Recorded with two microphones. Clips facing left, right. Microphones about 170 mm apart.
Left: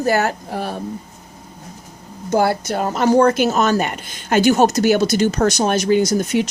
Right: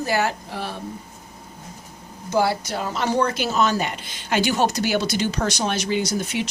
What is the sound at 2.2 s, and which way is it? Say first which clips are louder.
Speech: left 4 dB; 50° left (ahead or behind).